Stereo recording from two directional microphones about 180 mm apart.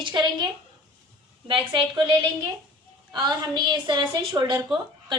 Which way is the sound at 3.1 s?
25° right (ahead or behind).